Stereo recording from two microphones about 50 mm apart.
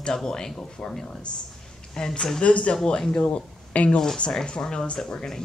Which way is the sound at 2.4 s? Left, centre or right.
Left.